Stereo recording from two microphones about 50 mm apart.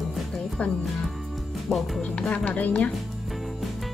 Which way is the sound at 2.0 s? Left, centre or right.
Left.